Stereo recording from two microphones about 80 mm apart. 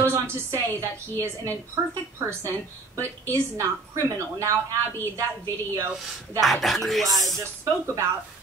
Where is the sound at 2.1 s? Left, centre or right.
Right.